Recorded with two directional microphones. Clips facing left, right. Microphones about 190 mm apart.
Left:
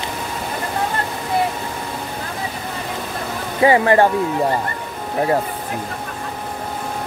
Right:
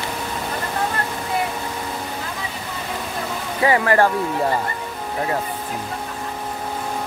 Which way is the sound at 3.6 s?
25° left (ahead or behind).